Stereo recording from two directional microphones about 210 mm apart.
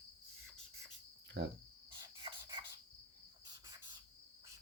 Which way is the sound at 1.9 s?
25° right (ahead or behind).